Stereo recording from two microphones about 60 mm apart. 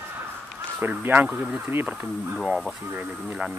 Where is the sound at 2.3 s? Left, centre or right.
Centre.